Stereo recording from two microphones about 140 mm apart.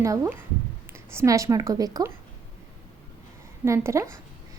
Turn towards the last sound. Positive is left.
turn(degrees=-20)  # may be behind; listen again after turning